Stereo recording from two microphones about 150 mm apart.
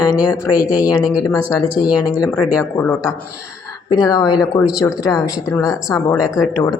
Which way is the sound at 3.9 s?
25° left (ahead or behind).